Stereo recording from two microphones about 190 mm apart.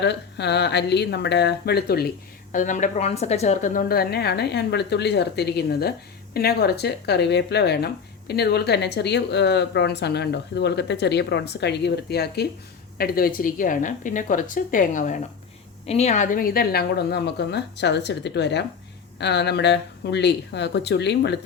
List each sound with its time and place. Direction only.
0.0 s a woman's voice: 65° left (ahead or behind)